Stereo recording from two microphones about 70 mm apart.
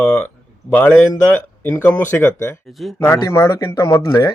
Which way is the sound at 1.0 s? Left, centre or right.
Left.